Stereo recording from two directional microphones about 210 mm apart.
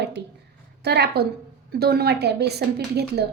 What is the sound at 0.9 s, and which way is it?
A woman's voice, 50° right (ahead or behind).